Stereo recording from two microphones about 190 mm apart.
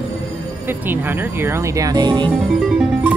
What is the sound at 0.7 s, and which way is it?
Speech, 10° right (ahead or behind).